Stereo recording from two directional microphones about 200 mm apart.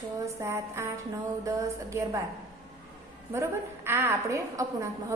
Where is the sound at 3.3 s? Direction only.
10° right (ahead or behind).